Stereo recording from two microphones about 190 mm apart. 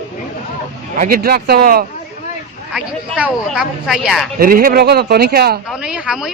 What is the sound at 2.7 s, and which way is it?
A man's voice, 5° right (ahead or behind).